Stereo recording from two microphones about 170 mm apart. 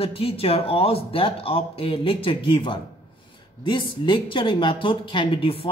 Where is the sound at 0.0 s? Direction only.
35° left (ahead or behind).